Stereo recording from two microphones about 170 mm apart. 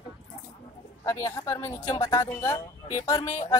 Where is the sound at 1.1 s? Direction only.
15° left (ahead or behind).